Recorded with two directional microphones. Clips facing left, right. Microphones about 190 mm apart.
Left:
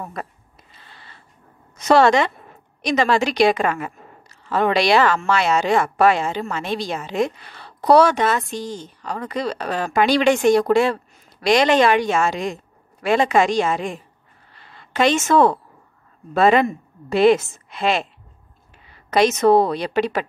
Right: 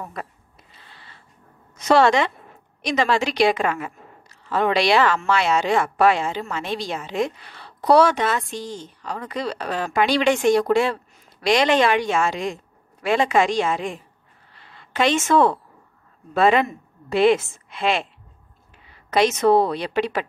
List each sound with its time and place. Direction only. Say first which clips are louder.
1.8 s a woman's voice: left 2 dB; 45° left (ahead or behind)
19.0 s a woman's voice: left 2 dB; 40° left (ahead or behind)